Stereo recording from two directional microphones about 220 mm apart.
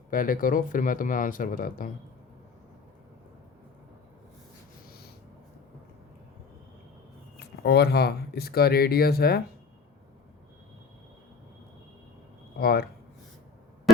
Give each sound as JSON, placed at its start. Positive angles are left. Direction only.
{"t": 0.1, "sound": "speech", "side_deg": 40}
{"t": 7.3, "sound": "speech", "side_deg": 50}
{"t": 12.5, "sound": "speech", "side_deg": 45}